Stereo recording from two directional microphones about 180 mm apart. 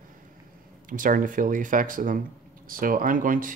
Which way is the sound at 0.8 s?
50° right (ahead or behind).